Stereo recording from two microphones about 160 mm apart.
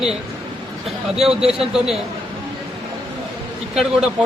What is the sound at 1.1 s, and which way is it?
Speech, 5° right (ahead or behind).